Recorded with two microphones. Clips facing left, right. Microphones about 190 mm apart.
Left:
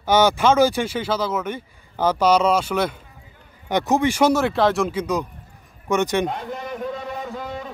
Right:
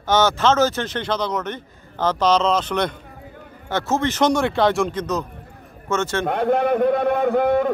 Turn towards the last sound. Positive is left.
turn(degrees=-60)  # may be behind; listen again after turning